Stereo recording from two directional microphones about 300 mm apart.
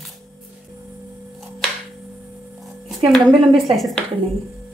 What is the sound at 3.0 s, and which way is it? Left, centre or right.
Speech, centre.